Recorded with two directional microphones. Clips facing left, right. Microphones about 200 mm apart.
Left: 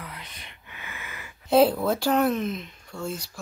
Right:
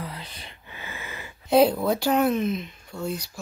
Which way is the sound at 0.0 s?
30° right (ahead or behind).